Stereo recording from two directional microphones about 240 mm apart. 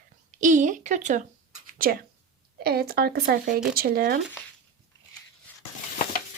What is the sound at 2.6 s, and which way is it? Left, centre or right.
Speech, right.